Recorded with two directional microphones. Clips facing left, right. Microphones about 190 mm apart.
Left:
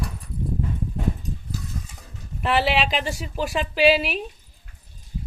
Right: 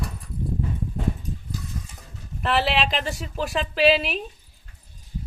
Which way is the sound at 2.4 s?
Centre (ahead or behind).